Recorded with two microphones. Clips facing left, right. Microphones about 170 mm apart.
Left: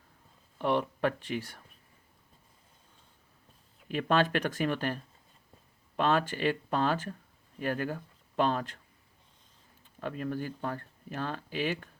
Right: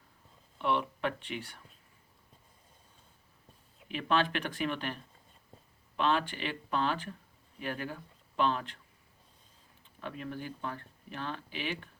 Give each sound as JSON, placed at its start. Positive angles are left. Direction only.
{"t": 0.6, "sound": "speech", "side_deg": 40}
{"t": 3.9, "sound": "speech", "side_deg": 45}
{"t": 6.0, "sound": "speech", "side_deg": 45}
{"t": 10.0, "sound": "speech", "side_deg": 45}